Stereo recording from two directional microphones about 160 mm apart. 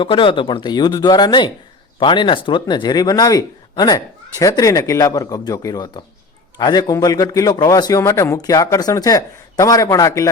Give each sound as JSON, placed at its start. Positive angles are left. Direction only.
{"t": 0.0, "sound": "speech", "side_deg": 30}